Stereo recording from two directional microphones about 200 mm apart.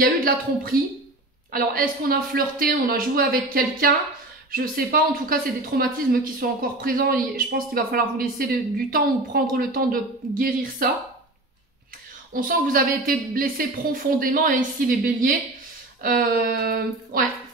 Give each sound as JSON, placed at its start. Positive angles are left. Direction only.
{"t": 0.0, "sound": "speech", "side_deg": -45}
{"t": 12.3, "sound": "speech", "side_deg": -45}